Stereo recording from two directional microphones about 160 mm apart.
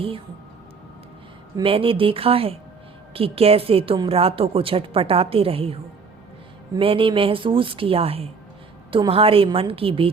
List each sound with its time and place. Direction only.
1.6 s a woman's voice: 35° right (ahead or behind)